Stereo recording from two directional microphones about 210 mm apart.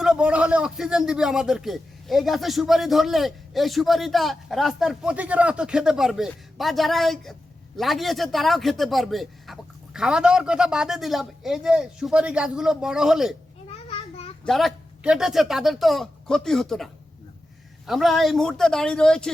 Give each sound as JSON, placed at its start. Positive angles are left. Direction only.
{"t": 0.0, "sound": "a man's voice", "side_deg": -5}
{"t": 13.7, "sound": "a sound", "side_deg": 30}
{"t": 14.4, "sound": "a man's voice", "side_deg": 0}